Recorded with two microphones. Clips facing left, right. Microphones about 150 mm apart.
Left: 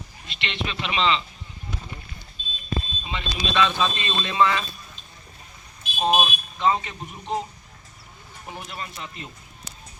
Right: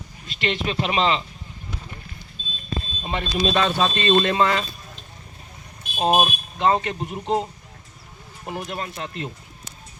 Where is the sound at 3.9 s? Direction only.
55° right (ahead or behind).